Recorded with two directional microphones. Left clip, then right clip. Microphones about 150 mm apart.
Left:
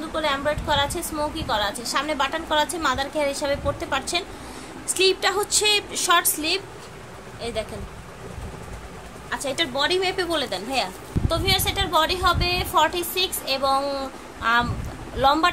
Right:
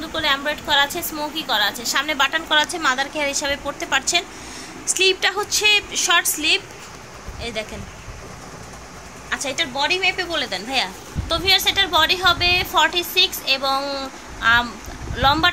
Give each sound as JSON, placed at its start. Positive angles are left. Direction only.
{"t": 0.1, "sound": "a woman's voice", "side_deg": -5}
{"t": 9.3, "sound": "a woman's voice", "side_deg": 10}
{"t": 9.8, "sound": "a woman's voice", "side_deg": 30}
{"t": 10.7, "sound": "a woman's voice", "side_deg": 5}